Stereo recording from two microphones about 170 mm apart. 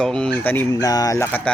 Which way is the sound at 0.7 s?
20° left (ahead or behind).